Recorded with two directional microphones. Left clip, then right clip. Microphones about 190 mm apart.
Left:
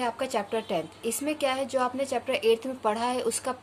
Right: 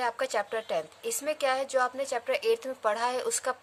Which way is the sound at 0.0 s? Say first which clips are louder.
Even; 30° right (ahead or behind).